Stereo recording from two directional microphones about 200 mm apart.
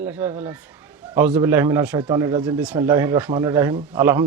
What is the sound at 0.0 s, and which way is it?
A man's voice, 10° right (ahead or behind).